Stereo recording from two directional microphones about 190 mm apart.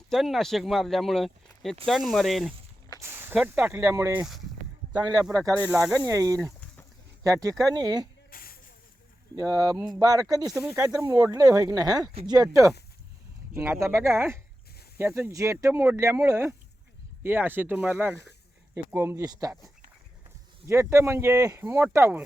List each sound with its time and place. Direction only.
0.1 s speech: centre (ahead or behind)
3.0 s speech: 10° right (ahead or behind)
5.7 s speech: 5° right (ahead or behind)
6.0 s speech: 15° right (ahead or behind)
6.4 s a sound: 5° left (ahead or behind)
7.3 s speech: 15° right (ahead or behind)
8.3 s a sound: 50° left (ahead or behind)
9.3 s speech: 20° right (ahead or behind)
10.5 s speech: centre (ahead or behind)
10.8 s speech: 20° right (ahead or behind)